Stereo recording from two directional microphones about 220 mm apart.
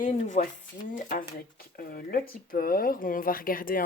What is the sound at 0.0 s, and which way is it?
Speech, 35° left (ahead or behind).